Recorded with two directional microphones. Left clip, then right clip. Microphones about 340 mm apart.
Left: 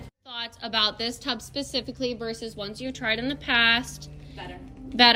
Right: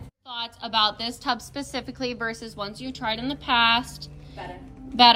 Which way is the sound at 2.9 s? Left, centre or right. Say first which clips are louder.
Left 1 dB; centre.